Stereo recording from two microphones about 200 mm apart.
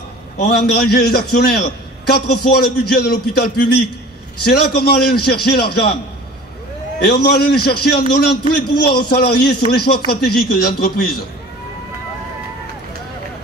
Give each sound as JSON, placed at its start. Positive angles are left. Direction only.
{"t": 0.5, "sound": "a man's voice", "side_deg": 50}
{"t": 4.5, "sound": "a man's voice", "side_deg": 50}
{"t": 7.0, "sound": "a man's voice", "side_deg": 50}